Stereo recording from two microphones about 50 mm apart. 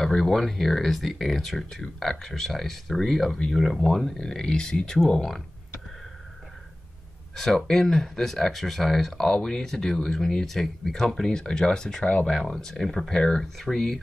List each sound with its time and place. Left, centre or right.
0.0 s speech: centre
7.3 s speech: centre
12.0 s speech: left
12.3 s speech: centre